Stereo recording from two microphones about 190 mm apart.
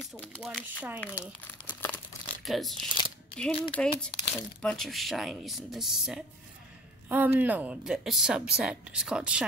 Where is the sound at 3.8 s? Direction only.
5° left (ahead or behind).